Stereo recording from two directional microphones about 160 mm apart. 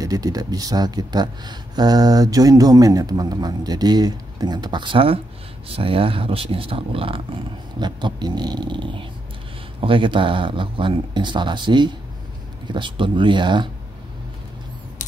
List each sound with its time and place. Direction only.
0.0 s speech: 20° right (ahead or behind)